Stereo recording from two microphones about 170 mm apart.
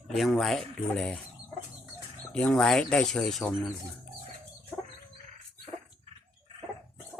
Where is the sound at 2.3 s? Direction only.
5° left (ahead or behind).